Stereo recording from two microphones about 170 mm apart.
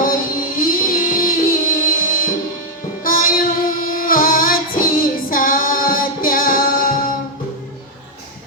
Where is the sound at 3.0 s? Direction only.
55° left (ahead or behind).